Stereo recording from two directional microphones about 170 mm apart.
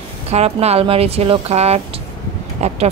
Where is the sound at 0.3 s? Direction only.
40° right (ahead or behind).